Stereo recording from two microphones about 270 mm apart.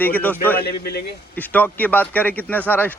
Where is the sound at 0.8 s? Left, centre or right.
Left.